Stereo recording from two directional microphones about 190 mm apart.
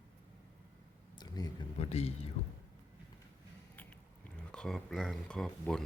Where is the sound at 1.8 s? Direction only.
35° left (ahead or behind).